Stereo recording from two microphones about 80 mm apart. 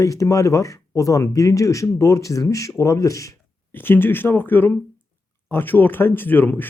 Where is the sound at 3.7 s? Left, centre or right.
Left.